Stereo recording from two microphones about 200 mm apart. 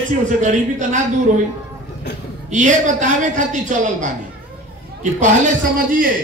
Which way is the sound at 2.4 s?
40° right (ahead or behind).